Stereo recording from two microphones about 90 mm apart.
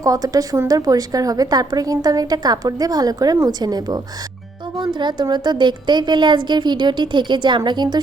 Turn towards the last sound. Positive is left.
turn(degrees=-55)  # may be behind; listen again after turning